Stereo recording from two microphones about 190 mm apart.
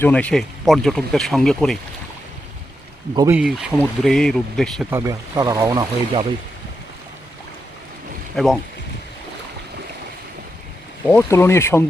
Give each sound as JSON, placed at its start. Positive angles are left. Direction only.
{"t": 0.0, "sound": "speech", "side_deg": 5}
{"t": 3.3, "sound": "speech", "side_deg": -5}
{"t": 4.9, "sound": "speech", "side_deg": -15}
{"t": 8.4, "sound": "speech", "side_deg": 5}
{"t": 11.0, "sound": "speech", "side_deg": 10}